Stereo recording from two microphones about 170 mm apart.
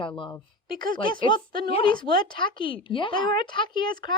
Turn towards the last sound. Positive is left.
turn(degrees=25)  # may be behind; listen again after turning